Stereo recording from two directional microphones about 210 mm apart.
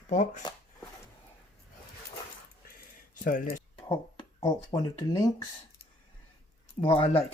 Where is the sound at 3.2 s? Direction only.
40° left (ahead or behind).